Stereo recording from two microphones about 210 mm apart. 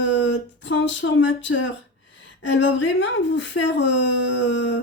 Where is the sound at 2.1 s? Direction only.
60° left (ahead or behind).